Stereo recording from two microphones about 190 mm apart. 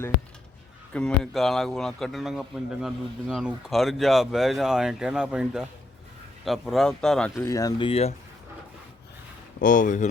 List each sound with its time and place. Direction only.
0.9 s a man's voice: 5° left (ahead or behind)
7.4 s speech: 15° left (ahead or behind)
7.9 s speech: 30° left (ahead or behind)
9.6 s speech: 45° left (ahead or behind)